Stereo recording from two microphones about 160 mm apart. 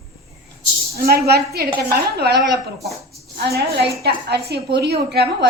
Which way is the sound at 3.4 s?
85° right.